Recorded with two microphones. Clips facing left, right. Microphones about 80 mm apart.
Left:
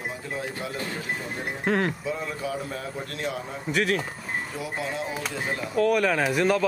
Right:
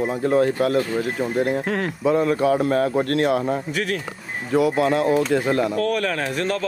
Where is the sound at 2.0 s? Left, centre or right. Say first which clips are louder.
Right 12 dB; right.